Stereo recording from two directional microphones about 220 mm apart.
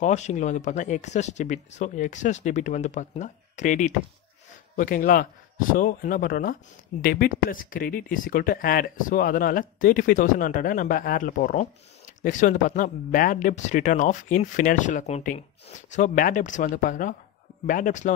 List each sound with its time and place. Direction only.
0.0 s speech: 30° left (ahead or behind)